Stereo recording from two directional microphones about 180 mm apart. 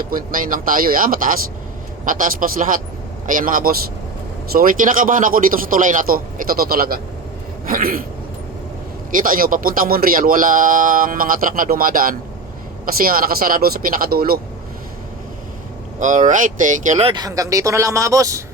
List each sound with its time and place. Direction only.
0.0 s speech: 50° right (ahead or behind)
9.1 s speech: 50° right (ahead or behind)
16.0 s speech: 45° right (ahead or behind)
17.1 s a man's voice: 20° right (ahead or behind)